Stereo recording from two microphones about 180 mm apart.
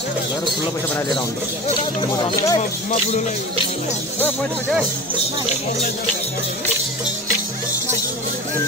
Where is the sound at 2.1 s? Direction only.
25° left (ahead or behind).